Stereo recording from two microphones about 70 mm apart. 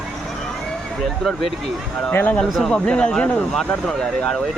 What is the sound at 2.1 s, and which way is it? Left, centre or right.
Speech, left.